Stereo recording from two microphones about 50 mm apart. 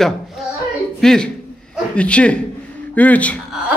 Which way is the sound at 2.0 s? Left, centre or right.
Left.